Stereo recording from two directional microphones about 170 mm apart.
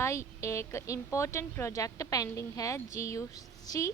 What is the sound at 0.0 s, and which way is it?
Speech, 15° left (ahead or behind).